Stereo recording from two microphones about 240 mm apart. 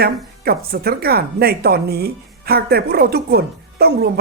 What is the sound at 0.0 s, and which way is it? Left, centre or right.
A woman's voice, right.